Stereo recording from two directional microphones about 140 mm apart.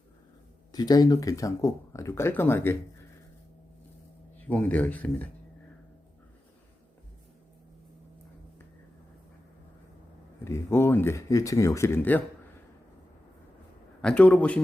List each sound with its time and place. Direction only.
0.7 s speech: 30° left (ahead or behind)
4.4 s speech: 10° left (ahead or behind)
10.4 s speech: 20° left (ahead or behind)
14.0 s speech: 10° left (ahead or behind)